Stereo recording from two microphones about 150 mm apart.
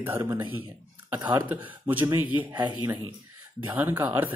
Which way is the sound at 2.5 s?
30° right (ahead or behind).